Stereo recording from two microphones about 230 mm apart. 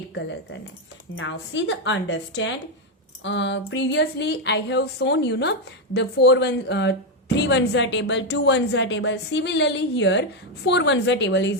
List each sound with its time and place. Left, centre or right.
1.1 s a woman's voice: left